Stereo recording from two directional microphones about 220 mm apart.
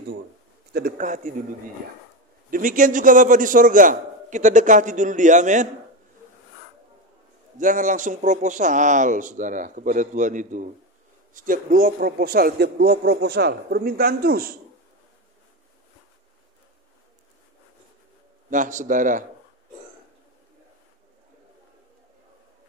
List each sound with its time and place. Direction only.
0.7 s a man's voice: 40° right (ahead or behind)
2.5 s a man's voice: 35° right (ahead or behind)
7.5 s a man's voice: 35° right (ahead or behind)
18.5 s a man's voice: 35° right (ahead or behind)